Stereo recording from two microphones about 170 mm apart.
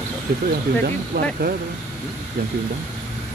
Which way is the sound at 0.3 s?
65° right (ahead or behind).